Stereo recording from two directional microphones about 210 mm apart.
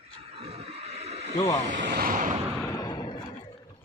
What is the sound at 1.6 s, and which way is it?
Vehicle, 40° right (ahead or behind).